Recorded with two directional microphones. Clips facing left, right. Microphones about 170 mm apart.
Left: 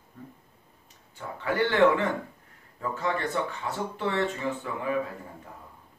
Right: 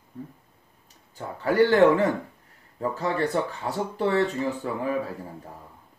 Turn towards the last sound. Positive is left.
turn(degrees=-35)  # may be behind; listen again after turning